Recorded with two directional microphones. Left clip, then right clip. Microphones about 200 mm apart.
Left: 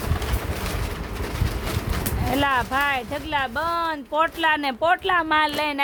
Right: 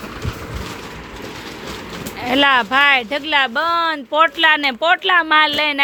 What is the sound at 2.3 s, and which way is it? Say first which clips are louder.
Speech: right 8 dB; 15° right (ahead or behind).